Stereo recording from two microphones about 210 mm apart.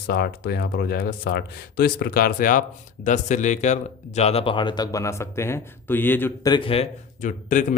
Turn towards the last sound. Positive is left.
turn(degrees=35)  # may be behind; listen again after turning